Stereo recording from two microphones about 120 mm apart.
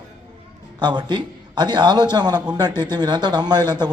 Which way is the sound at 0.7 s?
40° right (ahead or behind).